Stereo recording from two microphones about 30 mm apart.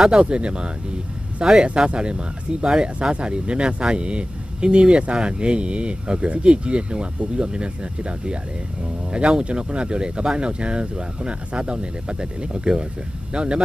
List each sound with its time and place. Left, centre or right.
0.2 s speech: right